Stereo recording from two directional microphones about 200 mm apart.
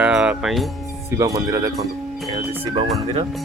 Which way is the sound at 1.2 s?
15° right (ahead or behind).